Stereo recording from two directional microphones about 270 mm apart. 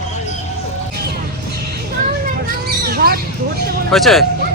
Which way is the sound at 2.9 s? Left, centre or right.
Right.